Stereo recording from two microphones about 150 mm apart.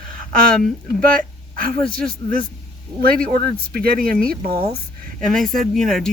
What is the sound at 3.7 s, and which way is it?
Speech, 80° right.